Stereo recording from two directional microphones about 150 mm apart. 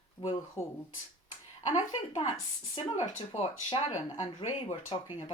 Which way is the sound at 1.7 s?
35° left (ahead or behind).